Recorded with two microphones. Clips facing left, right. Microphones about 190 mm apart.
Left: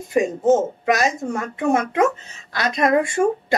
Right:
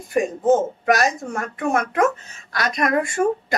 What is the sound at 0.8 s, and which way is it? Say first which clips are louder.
A woman's voice: even; 25° left (ahead or behind).